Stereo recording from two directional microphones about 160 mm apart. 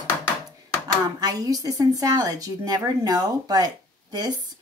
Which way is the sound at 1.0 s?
25° right (ahead or behind).